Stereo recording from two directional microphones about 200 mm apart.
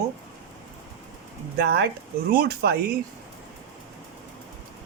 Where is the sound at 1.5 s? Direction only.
55° right (ahead or behind).